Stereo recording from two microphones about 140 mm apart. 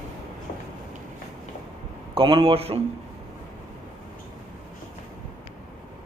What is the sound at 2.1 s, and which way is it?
Speech, 40° right (ahead or behind).